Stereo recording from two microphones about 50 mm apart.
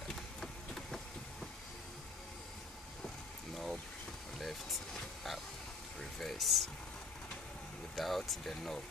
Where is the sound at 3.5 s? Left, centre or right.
Centre.